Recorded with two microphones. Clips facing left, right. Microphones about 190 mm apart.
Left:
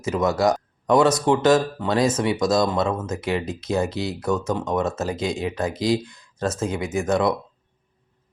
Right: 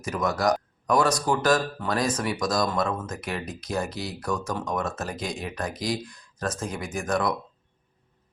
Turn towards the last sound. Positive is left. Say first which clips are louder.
# left 5 dB
turn(degrees=25)  # may be behind; listen again after turning